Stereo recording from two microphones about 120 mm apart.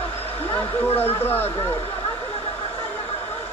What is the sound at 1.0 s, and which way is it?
Speech, 15° left (ahead or behind).